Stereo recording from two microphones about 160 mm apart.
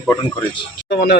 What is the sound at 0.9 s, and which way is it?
Speech, 85° left.